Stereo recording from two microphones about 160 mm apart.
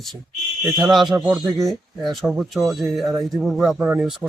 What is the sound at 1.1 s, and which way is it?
Speech, 15° right (ahead or behind).